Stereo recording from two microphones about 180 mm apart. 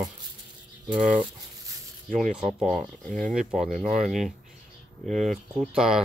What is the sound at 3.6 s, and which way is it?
Speech, 45° right (ahead or behind).